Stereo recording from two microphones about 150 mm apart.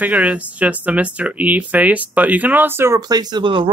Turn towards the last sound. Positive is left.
turn(degrees=-35)  # may be behind; listen again after turning